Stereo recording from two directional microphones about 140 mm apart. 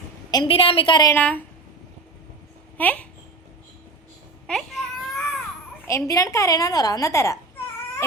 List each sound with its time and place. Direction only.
0.3 s a woman's voice: 30° left (ahead or behind)
0.5 s a woman's voice: 40° left (ahead or behind)
1.1 s a woman's voice: 10° left (ahead or behind)
2.7 s a child's voice: 10° left (ahead or behind)
4.4 s baby cry: centre (ahead or behind)
5.9 s a woman's voice: 25° left (ahead or behind)